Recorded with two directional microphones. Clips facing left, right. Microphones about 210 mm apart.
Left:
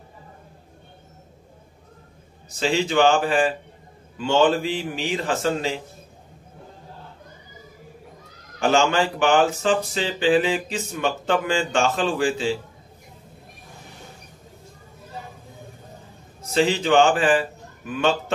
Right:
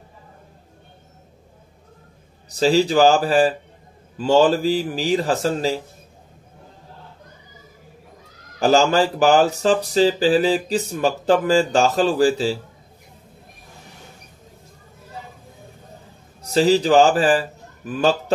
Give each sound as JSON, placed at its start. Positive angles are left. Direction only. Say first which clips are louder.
{"t": 2.5, "sound": "speech", "louder": "right 5 dB", "side_deg": -35}
{"t": 8.5, "sound": "speech", "louder": "right 4 dB", "side_deg": -35}
{"t": 16.3, "sound": "a man's voice", "louder": "right 5 dB", "side_deg": -40}